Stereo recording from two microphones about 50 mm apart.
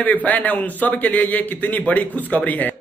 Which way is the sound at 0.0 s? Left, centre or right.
Left.